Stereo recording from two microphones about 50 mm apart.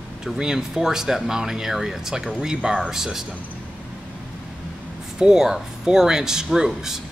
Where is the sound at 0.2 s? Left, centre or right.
Centre.